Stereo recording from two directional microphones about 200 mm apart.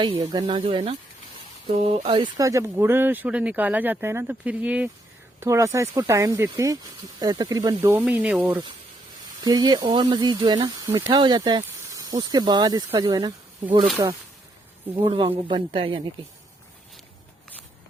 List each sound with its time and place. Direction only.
0.0 s speech: 20° right (ahead or behind)
9.4 s speech: 20° right (ahead or behind)
15.0 s speech: 25° right (ahead or behind)